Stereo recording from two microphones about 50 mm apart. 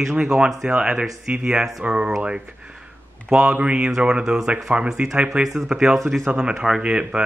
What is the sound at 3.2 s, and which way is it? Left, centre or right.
A man's voice, centre.